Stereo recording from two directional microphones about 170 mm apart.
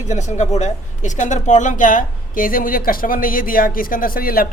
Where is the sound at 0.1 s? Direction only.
45° left (ahead or behind).